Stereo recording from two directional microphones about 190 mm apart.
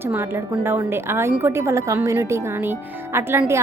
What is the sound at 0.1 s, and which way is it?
A woman's voice, 10° right (ahead or behind).